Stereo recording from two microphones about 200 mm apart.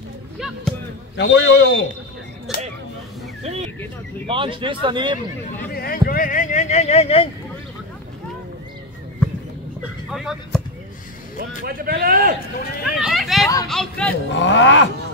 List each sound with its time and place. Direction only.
1.1 s a man's voice: 60° left (ahead or behind)
2.5 s a sound: centre (ahead or behind)
3.4 s speech: 30° right (ahead or behind)
5.6 s speech: 50° left (ahead or behind); by 7.2 s 30° left (ahead or behind)
10.1 s speech: centre (ahead or behind)
11.3 s a man's voice: 50° right (ahead or behind)
12.8 s a sound: centre (ahead or behind)
13.7 s speech: 5° left (ahead or behind)
14.3 s a man's voice: 65° left (ahead or behind)